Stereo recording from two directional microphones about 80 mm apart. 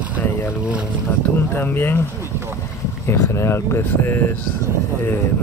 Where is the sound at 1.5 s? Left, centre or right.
Left.